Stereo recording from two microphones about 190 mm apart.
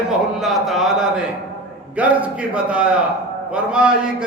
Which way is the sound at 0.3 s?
Centre (ahead or behind).